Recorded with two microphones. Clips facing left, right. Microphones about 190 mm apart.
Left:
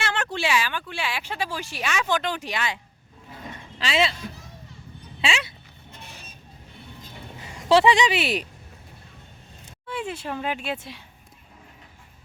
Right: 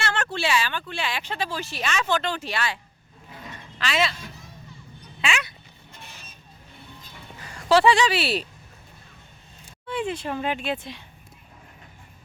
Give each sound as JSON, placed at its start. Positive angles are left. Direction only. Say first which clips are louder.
{"t": 0.0, "sound": "speech", "louder": "even", "side_deg": 15}
{"t": 3.8, "sound": "speech", "louder": "left 1 dB", "side_deg": 30}
{"t": 5.2, "sound": "a sound", "louder": "left 1 dB", "side_deg": 25}
{"t": 7.3, "sound": "speech", "louder": "left 1 dB", "side_deg": 20}
{"t": 9.8, "sound": "speech", "louder": "right 3 dB", "side_deg": 5}